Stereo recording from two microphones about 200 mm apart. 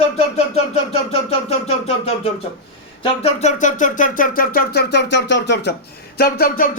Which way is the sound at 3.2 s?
35° left (ahead or behind).